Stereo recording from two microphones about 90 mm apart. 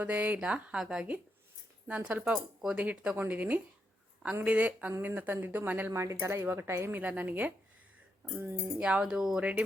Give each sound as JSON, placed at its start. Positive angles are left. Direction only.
{"t": 0.0, "sound": "speech", "side_deg": -15}
{"t": 5.9, "sound": "speech", "side_deg": -30}
{"t": 7.0, "sound": "speech", "side_deg": -15}
{"t": 8.8, "sound": "speech", "side_deg": -10}